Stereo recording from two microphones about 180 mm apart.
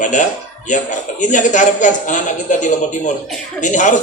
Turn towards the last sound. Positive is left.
turn(degrees=45)  # may be behind; listen again after turning